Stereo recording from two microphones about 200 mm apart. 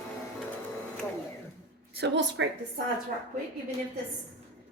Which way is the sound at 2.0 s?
60° right (ahead or behind).